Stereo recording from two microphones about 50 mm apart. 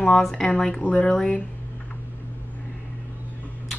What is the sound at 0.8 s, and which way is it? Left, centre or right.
Speech, left.